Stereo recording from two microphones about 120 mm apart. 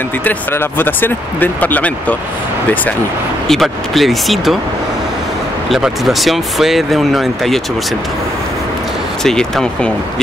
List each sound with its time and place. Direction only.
0.2 s speech: 15° left (ahead or behind)
3.4 s speech: centre (ahead or behind)
5.7 s speech: centre (ahead or behind)
9.2 s speech: 5° left (ahead or behind)